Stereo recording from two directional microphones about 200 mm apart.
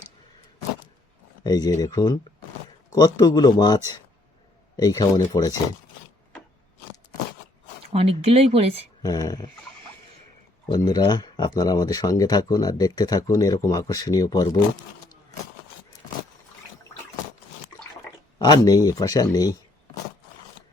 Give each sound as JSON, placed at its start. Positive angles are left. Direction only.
{"t": 1.5, "sound": "speech", "side_deg": 20}
{"t": 4.8, "sound": "speech", "side_deg": 15}
{"t": 7.9, "sound": "speech", "side_deg": -30}
{"t": 9.0, "sound": "speech", "side_deg": 20}
{"t": 10.7, "sound": "speech", "side_deg": 20}
{"t": 18.3, "sound": "speech", "side_deg": 20}